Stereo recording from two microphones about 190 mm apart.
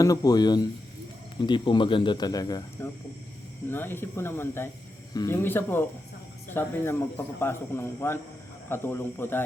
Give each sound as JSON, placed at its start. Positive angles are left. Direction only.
{"t": 0.0, "sound": "speech", "side_deg": 20}